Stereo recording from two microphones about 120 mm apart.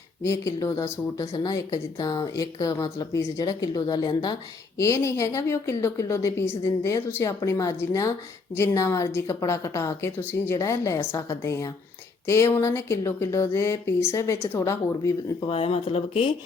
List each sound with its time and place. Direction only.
0.2 s a woman's voice: 25° left (ahead or behind)
4.8 s a woman's voice: 25° left (ahead or behind)
15.4 s speech: 50° left (ahead or behind)